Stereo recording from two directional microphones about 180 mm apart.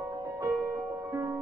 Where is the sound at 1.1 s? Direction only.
20° right (ahead or behind).